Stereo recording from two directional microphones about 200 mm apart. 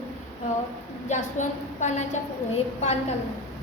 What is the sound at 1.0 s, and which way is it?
A woman's voice, 35° left (ahead or behind).